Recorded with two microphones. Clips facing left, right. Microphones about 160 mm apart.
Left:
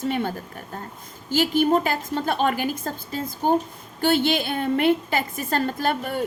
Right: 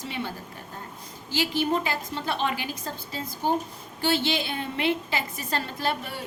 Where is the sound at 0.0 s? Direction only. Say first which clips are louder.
Left 8 dB; 50° left (ahead or behind).